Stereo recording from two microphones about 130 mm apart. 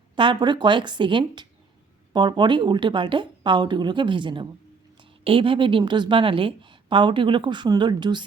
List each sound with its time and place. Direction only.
0.2 s a woman's voice: 35° right (ahead or behind)